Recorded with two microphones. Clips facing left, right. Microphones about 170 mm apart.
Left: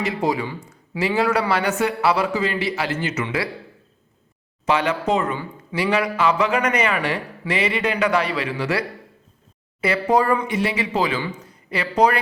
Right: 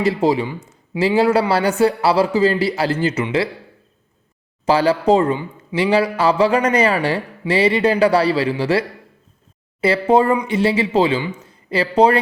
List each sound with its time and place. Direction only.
0.0 s a man's voice: 30° right (ahead or behind)
4.6 s a man's voice: 35° right (ahead or behind)
9.8 s a man's voice: 30° right (ahead or behind)